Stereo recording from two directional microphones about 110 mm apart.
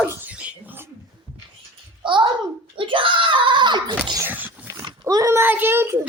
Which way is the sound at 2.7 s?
50° right (ahead or behind).